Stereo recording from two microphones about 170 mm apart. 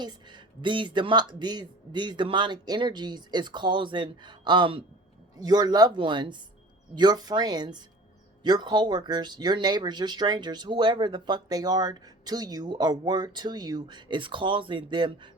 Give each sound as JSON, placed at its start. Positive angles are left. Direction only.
{"t": 0.0, "sound": "speech", "side_deg": -25}